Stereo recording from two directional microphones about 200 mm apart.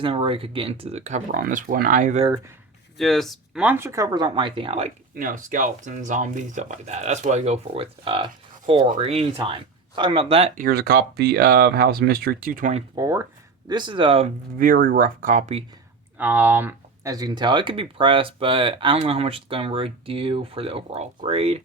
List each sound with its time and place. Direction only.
0.0 s speech: 25° right (ahead or behind)
3.0 s speech: centre (ahead or behind); by 4.9 s 30° right (ahead or behind)
5.1 s speech: 40° right (ahead or behind)
10.6 s speech: 50° right (ahead or behind)
13.0 s speech: 15° right (ahead or behind)
14.6 s speech: 45° right (ahead or behind)
16.1 s speech: 10° right (ahead or behind); by 21.6 s 30° right (ahead or behind)